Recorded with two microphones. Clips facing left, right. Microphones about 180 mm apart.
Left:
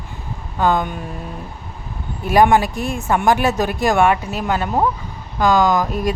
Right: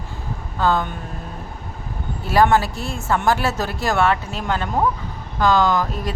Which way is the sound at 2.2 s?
15° left (ahead or behind).